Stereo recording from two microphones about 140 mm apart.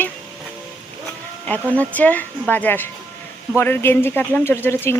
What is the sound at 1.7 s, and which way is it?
Speech, 10° left (ahead or behind).